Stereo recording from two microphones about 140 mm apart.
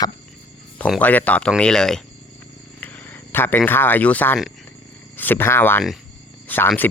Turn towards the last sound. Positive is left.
turn(degrees=15)  # may be behind; listen again after turning